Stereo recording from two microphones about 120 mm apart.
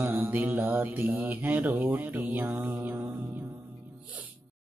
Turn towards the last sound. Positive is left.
turn(degrees=-15)  # may be behind; listen again after turning